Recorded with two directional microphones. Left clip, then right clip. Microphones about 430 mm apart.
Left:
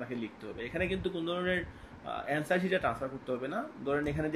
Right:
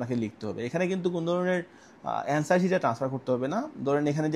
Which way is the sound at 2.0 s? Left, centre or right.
Right.